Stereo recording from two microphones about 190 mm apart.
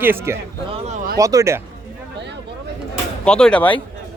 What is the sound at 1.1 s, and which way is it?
Speech, 15° right (ahead or behind).